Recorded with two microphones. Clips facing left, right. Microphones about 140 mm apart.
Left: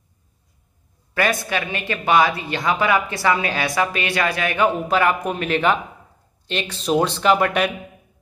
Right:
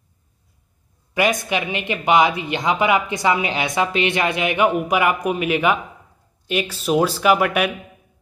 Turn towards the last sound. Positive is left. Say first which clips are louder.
# even
turn(degrees=-5)  # may be behind; listen again after turning